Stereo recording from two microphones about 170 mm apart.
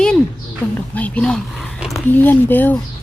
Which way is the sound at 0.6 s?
10° left (ahead or behind).